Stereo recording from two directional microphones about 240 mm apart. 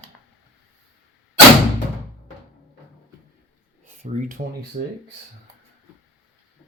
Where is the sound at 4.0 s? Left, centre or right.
Right.